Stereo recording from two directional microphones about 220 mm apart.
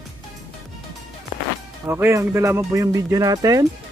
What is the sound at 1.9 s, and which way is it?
Speech, 10° right (ahead or behind).